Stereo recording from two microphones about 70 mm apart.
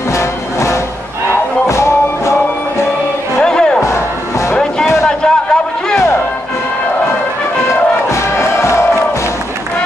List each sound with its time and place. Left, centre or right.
0.1 s music: left
3.3 s music: centre
3.8 s music: left
5.0 s a sound: centre
8.1 s crowd: left